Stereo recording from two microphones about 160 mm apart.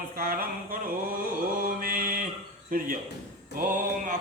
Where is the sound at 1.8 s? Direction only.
60° right (ahead or behind).